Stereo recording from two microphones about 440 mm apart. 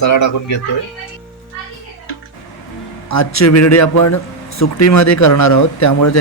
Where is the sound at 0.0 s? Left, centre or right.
Left.